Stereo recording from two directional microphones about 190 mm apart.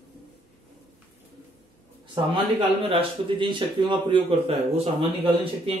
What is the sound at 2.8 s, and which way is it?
Speech, 25° right (ahead or behind).